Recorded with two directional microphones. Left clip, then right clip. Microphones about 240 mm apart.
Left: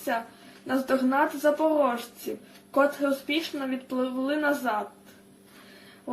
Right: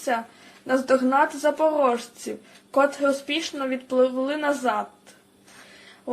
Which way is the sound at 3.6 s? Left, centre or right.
Right.